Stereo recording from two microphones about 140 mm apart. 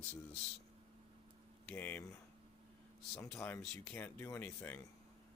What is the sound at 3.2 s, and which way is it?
Speech, 15° left (ahead or behind).